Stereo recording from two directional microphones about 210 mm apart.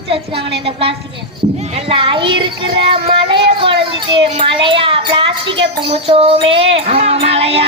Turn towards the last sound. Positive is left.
turn(degrees=-25)  # may be behind; listen again after turning